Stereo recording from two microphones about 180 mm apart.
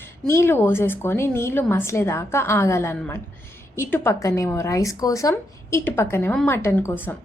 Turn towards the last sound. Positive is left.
turn(degrees=15)  # may be behind; listen again after turning